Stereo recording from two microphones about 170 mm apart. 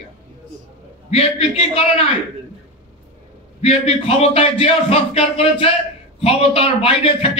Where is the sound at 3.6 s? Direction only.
35° left (ahead or behind).